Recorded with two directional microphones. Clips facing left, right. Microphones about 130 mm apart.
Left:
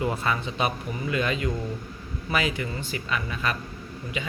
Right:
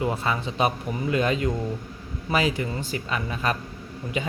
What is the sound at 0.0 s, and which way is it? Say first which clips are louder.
Speech: right 1 dB; 25° right (ahead or behind).